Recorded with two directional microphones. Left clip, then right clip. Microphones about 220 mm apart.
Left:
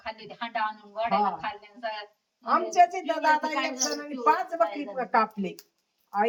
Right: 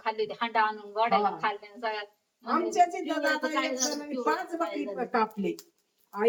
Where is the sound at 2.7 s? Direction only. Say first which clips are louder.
Left 4 dB; 10° left (ahead or behind).